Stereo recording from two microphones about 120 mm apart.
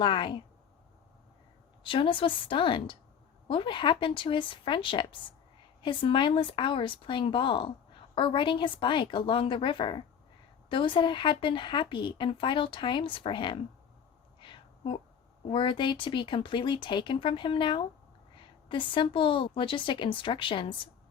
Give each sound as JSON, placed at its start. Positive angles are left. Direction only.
{"t": 0.0, "sound": "speech", "side_deg": 40}
{"t": 1.8, "sound": "speech", "side_deg": 45}
{"t": 14.4, "sound": "a sound", "side_deg": 45}
{"t": 15.4, "sound": "speech", "side_deg": 45}